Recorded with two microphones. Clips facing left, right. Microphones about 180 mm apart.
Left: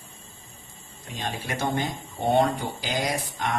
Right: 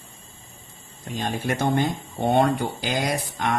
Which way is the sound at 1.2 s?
50° right (ahead or behind).